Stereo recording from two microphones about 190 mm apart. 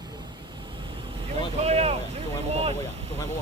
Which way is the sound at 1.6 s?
35° right (ahead or behind).